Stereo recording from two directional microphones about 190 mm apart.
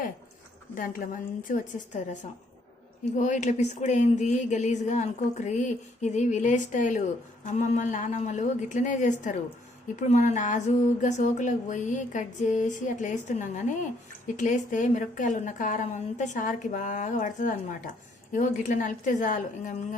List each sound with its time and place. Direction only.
0.8 s a woman's voice: 45° left (ahead or behind)
3.2 s a woman's voice: 40° left (ahead or behind)